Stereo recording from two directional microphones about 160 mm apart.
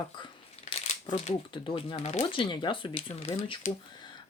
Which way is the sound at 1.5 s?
35° left (ahead or behind).